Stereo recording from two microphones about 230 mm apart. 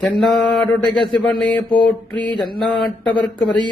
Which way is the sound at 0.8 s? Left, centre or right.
Centre.